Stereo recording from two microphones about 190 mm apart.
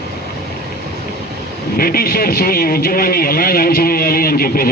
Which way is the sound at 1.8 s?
50° left (ahead or behind).